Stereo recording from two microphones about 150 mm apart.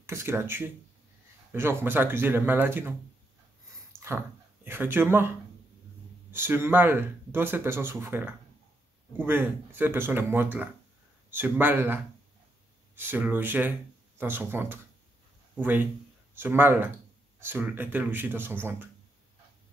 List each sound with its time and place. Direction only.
0.0 s speech: 20° right (ahead or behind)
4.6 s speech: 15° right (ahead or behind)
6.3 s speech: 15° right (ahead or behind)